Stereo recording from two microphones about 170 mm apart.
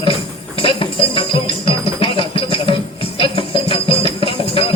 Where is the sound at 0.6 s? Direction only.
30° left (ahead or behind).